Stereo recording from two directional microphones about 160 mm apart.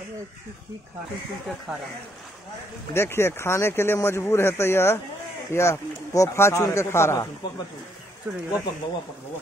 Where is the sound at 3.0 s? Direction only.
15° left (ahead or behind).